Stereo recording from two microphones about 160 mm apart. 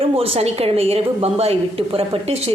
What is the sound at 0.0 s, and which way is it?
A woman's voice, 35° right (ahead or behind).